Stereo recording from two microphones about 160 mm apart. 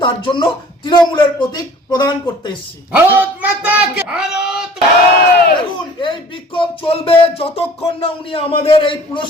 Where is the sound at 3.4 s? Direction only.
10° right (ahead or behind).